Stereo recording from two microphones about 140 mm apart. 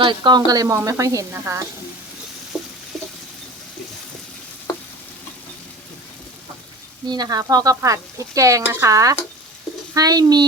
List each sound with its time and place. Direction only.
0.0 s a woman's voice: 35° right (ahead or behind)
2.5 s a sound: centre (ahead or behind)
7.1 s a woman's voice: 30° right (ahead or behind)